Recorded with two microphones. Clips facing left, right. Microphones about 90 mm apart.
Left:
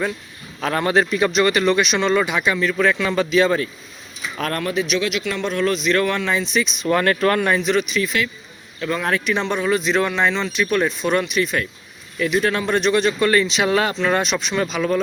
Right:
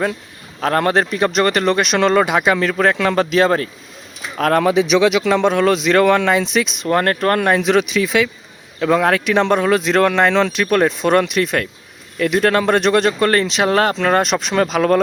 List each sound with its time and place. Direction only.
0.6 s speech: 50° right (ahead or behind)
1.8 s speech: 65° right (ahead or behind)
3.0 s speech: 50° right (ahead or behind)
4.4 s speech: 80° right
6.9 s speech: 45° right (ahead or behind); by 15.0 s 65° right (ahead or behind)